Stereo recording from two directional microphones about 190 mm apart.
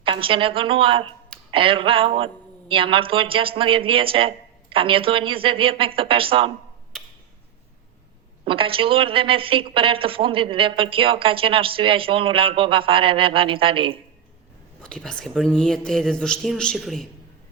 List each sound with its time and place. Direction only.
0.0 s a woman's voice: 30° right (ahead or behind)
8.4 s a woman's voice: 30° right (ahead or behind)
14.8 s speech: 5° left (ahead or behind)